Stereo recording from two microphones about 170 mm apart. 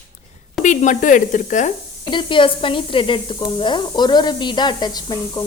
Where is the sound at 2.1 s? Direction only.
30° left (ahead or behind).